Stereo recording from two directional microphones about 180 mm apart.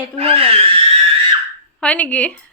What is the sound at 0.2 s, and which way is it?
Speech, 30° right (ahead or behind).